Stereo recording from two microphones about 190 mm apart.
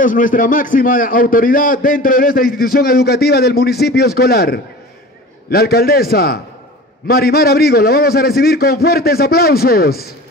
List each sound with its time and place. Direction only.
0.0 s a man's voice: 45° left (ahead or behind)